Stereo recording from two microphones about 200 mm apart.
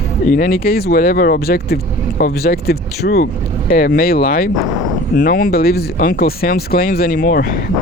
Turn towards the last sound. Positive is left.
turn(degrees=50)  # may be behind; listen again after turning